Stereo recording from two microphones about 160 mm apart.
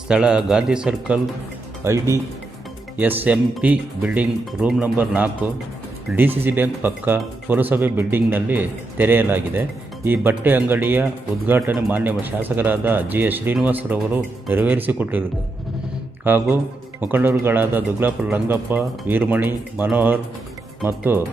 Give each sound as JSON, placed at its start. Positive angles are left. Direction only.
{"t": 0.1, "sound": "a man's voice", "side_deg": -5}
{"t": 1.8, "sound": "speech", "side_deg": -20}
{"t": 16.2, "sound": "speech", "side_deg": -10}